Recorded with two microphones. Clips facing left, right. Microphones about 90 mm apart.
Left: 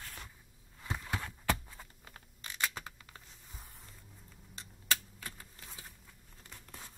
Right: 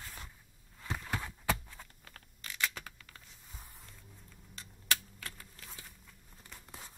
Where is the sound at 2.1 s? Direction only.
25° left (ahead or behind).